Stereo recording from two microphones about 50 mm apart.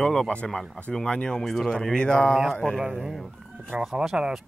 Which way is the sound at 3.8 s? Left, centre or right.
Centre.